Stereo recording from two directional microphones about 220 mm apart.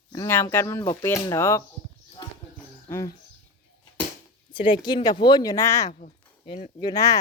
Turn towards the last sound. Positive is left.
turn(degrees=20)  # may be behind; listen again after turning